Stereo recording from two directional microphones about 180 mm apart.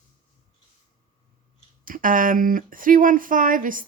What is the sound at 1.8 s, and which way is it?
Speech, 50° right (ahead or behind).